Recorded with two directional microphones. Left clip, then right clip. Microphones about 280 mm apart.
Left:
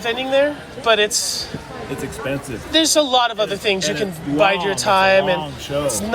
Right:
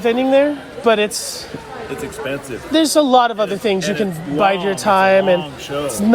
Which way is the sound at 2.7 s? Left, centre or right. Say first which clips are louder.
Right 3 dB; centre.